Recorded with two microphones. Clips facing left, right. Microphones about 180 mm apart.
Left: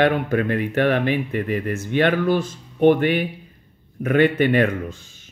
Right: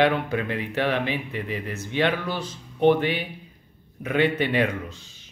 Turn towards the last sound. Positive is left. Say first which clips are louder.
# left 5 dB
turn(degrees=50)  # may be behind; listen again after turning